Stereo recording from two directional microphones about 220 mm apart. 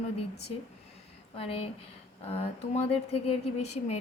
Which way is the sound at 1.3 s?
25° left (ahead or behind).